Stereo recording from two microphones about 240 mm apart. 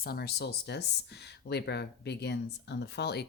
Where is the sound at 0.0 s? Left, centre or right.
Left.